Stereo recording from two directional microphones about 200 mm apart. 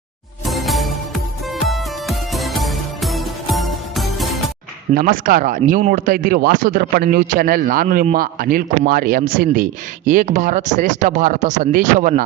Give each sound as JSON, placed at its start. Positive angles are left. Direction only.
{"t": 0.4, "sound": "music", "side_deg": 0}
{"t": 4.9, "sound": "speech", "side_deg": -45}